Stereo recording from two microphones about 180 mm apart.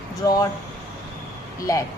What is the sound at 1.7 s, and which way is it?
Speech, 20° left (ahead or behind).